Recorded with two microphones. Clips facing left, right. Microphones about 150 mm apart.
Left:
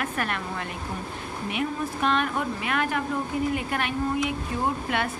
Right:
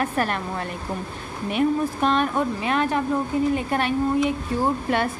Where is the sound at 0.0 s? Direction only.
35° right (ahead or behind).